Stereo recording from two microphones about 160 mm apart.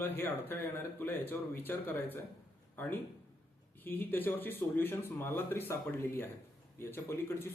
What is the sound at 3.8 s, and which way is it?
Speech, 10° left (ahead or behind).